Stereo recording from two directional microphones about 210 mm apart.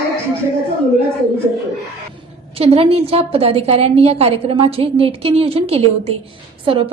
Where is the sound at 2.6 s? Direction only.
30° right (ahead or behind).